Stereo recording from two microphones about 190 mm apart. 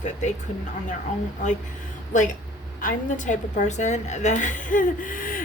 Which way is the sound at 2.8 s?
45° left (ahead or behind).